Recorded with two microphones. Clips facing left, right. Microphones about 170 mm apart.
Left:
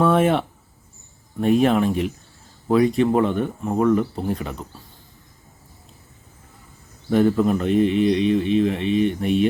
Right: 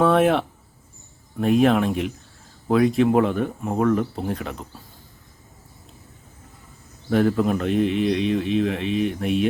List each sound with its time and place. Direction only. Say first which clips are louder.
0.0 s speech: even; centre (ahead or behind)
7.1 s speech: left 2 dB; centre (ahead or behind)